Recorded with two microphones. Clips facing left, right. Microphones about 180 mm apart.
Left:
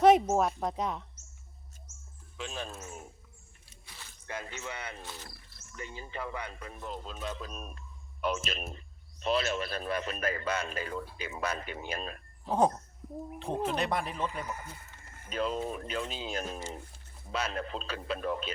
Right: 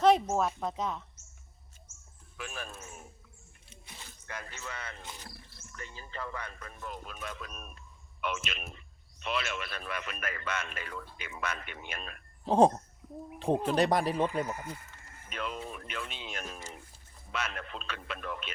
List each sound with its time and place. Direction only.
0.0 s speech: 15° left (ahead or behind)
2.4 s speech: 20° left (ahead or behind)
3.7 s music: 20° right (ahead or behind)
4.3 s speech: 25° left (ahead or behind)
5.0 s speech: 15° right (ahead or behind)
5.7 s a man's voice: 20° left (ahead or behind)
12.5 s speech: 30° right (ahead or behind)
13.7 s speech: 35° right (ahead or behind)
15.3 s a man's voice: 35° left (ahead or behind)